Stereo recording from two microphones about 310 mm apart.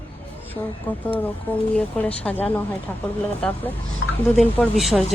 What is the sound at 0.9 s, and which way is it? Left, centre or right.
Speech, centre.